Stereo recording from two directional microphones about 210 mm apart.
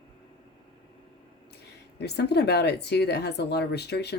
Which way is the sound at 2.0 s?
55° left (ahead or behind).